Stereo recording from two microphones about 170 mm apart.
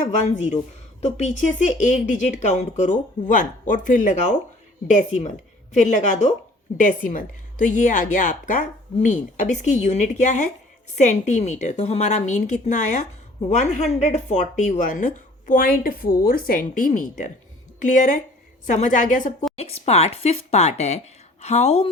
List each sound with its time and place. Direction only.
1.0 s a woman's voice: 40° left (ahead or behind)
19.5 s speech: 35° left (ahead or behind)